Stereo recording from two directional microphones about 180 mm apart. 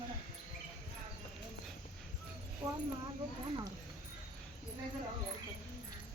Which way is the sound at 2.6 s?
25° right (ahead or behind).